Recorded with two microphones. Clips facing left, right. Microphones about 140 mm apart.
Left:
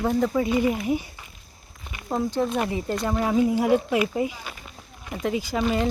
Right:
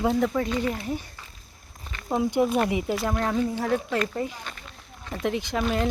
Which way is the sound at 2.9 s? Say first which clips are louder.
Left 2 dB; centre (ahead or behind).